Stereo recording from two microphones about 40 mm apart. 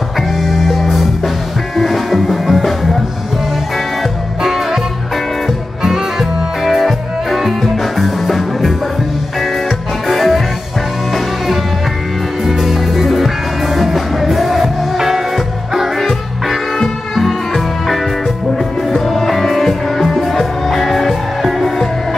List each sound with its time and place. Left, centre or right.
0.4 s music: centre
5.8 s music: centre
6.6 s music: centre
10.0 s music: centre
12.4 s music: centre
16.1 s music: centre
18.9 s music: centre